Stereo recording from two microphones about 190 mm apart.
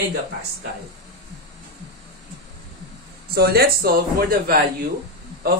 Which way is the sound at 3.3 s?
55° right (ahead or behind).